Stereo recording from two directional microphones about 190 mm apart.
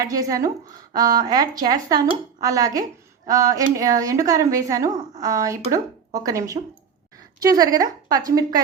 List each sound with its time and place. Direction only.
0.0 s speech: 20° right (ahead or behind)